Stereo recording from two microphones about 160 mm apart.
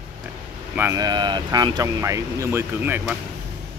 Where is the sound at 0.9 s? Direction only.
25° right (ahead or behind).